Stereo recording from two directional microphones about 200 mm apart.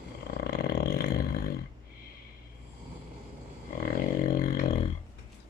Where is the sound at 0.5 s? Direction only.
55° left (ahead or behind).